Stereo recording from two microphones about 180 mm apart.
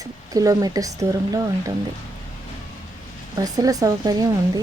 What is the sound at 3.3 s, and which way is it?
Speech, 20° right (ahead or behind).